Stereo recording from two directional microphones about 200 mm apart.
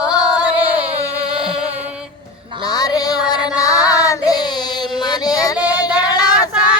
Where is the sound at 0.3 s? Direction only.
5° right (ahead or behind).